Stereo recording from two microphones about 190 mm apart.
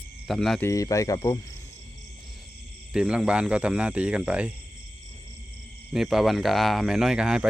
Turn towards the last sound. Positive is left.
turn(degrees=-5)  # may be behind; listen again after turning